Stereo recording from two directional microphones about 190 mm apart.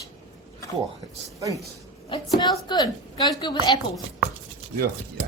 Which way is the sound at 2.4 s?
20° left (ahead or behind).